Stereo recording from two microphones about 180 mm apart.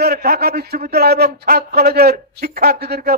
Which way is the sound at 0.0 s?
60° right (ahead or behind).